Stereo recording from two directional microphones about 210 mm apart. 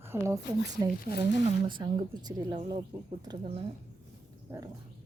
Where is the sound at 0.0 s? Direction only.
10° right (ahead or behind).